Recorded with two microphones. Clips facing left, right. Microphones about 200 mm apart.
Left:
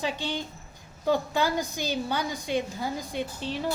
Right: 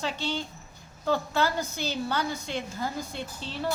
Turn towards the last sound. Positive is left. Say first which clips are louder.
# left 5 dB
turn(degrees=15)  # may be behind; listen again after turning